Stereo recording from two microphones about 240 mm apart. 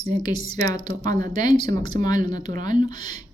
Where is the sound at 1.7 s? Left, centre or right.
Centre.